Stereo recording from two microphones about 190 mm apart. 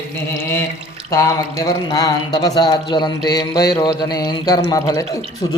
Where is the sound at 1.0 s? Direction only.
15° left (ahead or behind).